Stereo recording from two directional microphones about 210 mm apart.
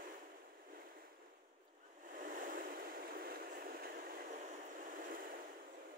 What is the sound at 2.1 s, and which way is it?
Train, 40° right (ahead or behind).